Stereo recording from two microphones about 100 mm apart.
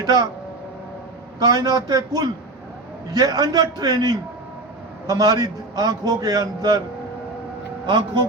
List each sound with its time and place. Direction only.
0.0 s speech: 40° right (ahead or behind)
1.4 s a man's voice: 40° right (ahead or behind)